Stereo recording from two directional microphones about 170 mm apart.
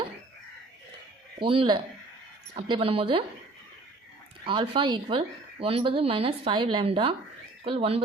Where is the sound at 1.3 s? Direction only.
30° right (ahead or behind).